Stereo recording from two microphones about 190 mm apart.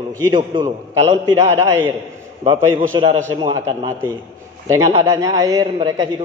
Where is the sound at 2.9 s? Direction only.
25° right (ahead or behind).